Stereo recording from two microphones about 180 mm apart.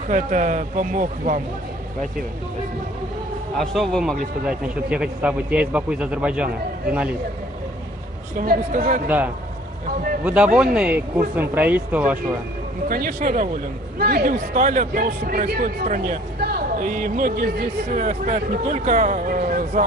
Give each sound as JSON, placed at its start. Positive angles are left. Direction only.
{"t": 0.1, "sound": "speech", "side_deg": -45}
{"t": 3.5, "sound": "speech", "side_deg": 0}
{"t": 8.4, "sound": "speech", "side_deg": -50}
{"t": 10.2, "sound": "speech", "side_deg": -5}
{"t": 12.8, "sound": "speech", "side_deg": -50}